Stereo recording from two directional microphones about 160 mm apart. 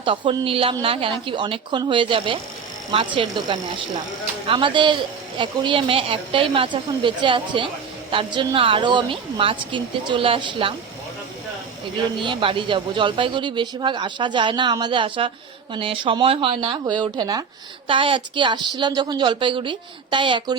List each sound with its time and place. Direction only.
0.0 s speech: 30° right (ahead or behind)
12.2 s speech: 30° right (ahead or behind)